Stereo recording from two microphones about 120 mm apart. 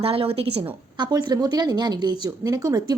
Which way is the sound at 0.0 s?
55° right (ahead or behind).